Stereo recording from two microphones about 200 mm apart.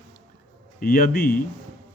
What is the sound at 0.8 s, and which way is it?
Speech, 45° left (ahead or behind).